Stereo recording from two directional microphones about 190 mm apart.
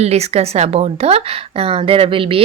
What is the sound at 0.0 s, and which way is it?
A woman's voice, 35° right (ahead or behind).